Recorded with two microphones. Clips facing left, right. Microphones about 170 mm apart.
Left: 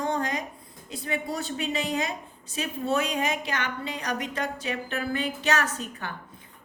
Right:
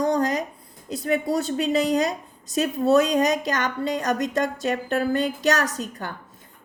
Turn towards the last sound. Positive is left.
turn(degrees=-40)  # may be behind; listen again after turning